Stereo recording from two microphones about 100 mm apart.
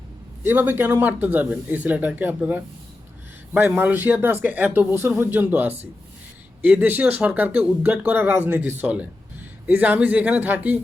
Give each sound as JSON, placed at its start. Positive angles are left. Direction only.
{"t": 0.4, "sound": "speech", "side_deg": -20}